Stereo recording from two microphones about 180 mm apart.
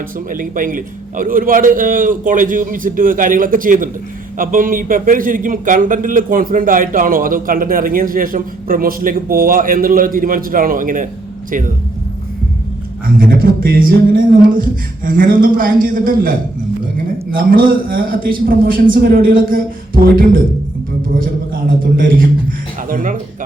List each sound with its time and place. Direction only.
0.3 s a man's voice: 50° right (ahead or behind)
13.1 s a man's voice: 55° right (ahead or behind)